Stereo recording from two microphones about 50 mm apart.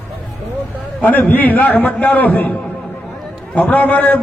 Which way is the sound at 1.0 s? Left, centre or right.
Left.